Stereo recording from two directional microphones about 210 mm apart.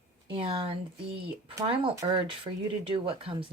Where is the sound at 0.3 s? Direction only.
25° right (ahead or behind).